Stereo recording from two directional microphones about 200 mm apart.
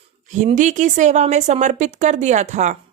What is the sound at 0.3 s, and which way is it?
Speech, 40° right (ahead or behind).